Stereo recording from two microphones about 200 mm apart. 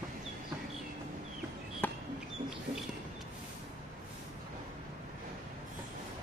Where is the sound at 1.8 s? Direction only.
10° left (ahead or behind).